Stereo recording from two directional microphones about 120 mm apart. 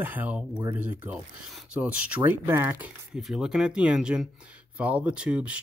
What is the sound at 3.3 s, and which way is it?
Speech, 5° right (ahead or behind).